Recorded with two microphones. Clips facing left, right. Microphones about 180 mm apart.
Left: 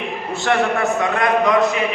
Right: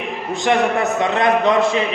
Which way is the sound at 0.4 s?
20° right (ahead or behind).